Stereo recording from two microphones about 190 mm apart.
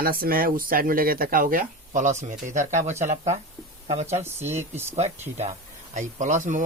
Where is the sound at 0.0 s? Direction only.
50° right (ahead or behind).